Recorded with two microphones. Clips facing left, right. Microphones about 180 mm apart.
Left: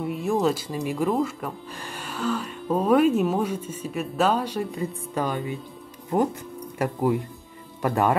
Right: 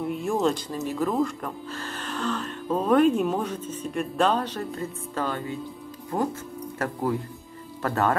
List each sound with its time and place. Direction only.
0.0 s speech: centre (ahead or behind)